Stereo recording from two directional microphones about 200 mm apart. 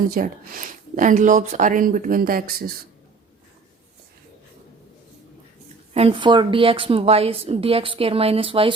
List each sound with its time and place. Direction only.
0.1 s speech: 45° right (ahead or behind)
5.9 s a woman's voice: 30° right (ahead or behind)